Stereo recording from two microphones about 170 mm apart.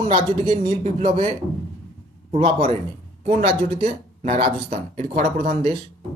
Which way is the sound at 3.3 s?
45° right (ahead or behind).